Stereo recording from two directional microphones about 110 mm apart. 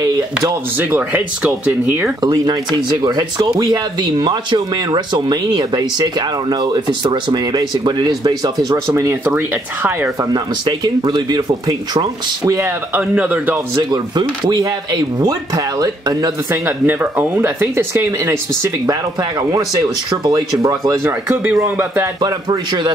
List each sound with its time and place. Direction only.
0.7 s speech: 15° right (ahead or behind)
2.2 s speech: 40° right (ahead or behind)
8.8 s speech: 25° right (ahead or behind)
10.3 s speech: 40° right (ahead or behind)
12.4 s speech: 25° right (ahead or behind)
12.9 s speech: 15° right (ahead or behind)
14.1 s speech: 40° right (ahead or behind)
16.6 s speech: 15° right (ahead or behind); by 21.0 s 35° right (ahead or behind)
21.0 s speech: 20° right (ahead or behind)
22.2 s speech: 40° right (ahead or behind)